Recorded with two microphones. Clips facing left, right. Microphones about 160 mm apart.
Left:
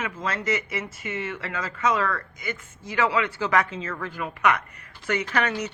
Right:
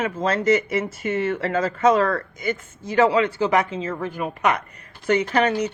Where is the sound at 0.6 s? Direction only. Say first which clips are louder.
Right 8 dB; 45° right (ahead or behind).